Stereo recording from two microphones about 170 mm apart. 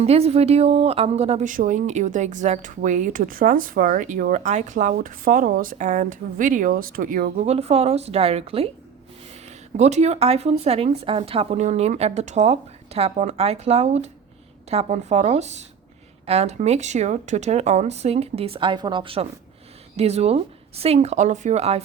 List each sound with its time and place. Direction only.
0.0 s speech: 35° right (ahead or behind); by 7.4 s 55° right (ahead or behind)
7.4 s speech: 40° right (ahead or behind)